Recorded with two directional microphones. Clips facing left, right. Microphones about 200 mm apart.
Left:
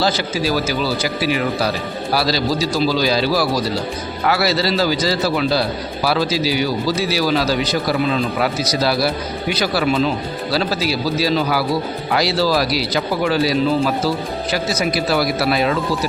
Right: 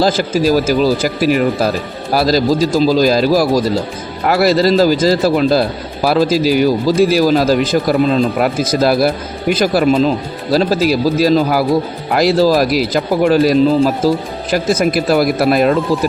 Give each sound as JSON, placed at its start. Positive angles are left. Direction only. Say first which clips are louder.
{"t": 0.0, "sound": "a man's voice", "louder": "right 6 dB", "side_deg": -45}